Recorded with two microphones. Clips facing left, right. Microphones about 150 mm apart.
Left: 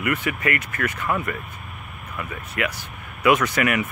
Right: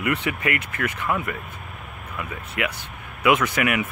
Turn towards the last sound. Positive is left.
turn(degrees=-10)  # may be behind; listen again after turning